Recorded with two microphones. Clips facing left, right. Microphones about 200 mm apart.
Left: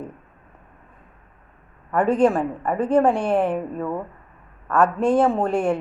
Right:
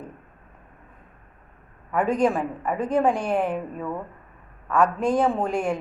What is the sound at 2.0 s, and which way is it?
Speech, 30° left (ahead or behind).